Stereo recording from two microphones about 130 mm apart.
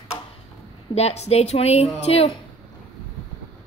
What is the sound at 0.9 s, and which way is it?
A woman's voice, 55° left (ahead or behind).